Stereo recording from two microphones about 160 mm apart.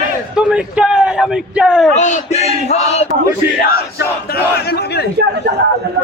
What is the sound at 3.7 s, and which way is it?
Battle cry, 75° left (ahead or behind).